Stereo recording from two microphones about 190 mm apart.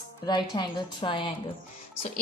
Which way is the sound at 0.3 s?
25° left (ahead or behind).